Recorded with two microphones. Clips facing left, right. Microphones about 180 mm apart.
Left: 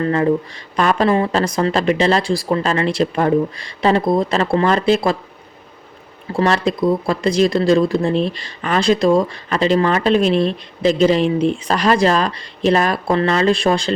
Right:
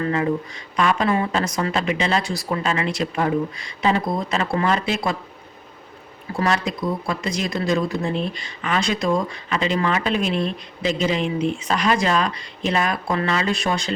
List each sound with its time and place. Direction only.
0.0 s speech: 35° left (ahead or behind)
6.3 s speech: 30° left (ahead or behind)